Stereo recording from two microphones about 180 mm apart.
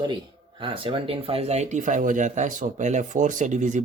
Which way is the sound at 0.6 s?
30° right (ahead or behind).